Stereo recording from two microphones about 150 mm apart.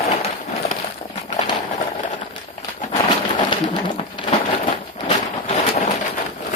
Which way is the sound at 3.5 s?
30° left (ahead or behind).